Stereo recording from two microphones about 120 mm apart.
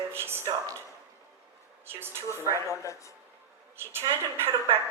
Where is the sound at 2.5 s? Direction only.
25° left (ahead or behind).